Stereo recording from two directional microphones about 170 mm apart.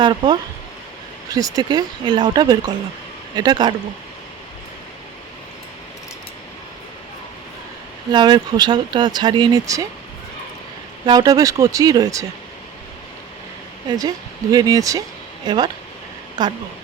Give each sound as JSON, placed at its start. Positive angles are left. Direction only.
{"t": 0.0, "sound": "speech", "side_deg": -25}
{"t": 8.1, "sound": "speech", "side_deg": -25}
{"t": 11.0, "sound": "speech", "side_deg": -25}
{"t": 13.8, "sound": "speech", "side_deg": -25}